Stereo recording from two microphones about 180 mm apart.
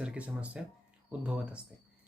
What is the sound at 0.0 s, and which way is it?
Speech, 5° right (ahead or behind).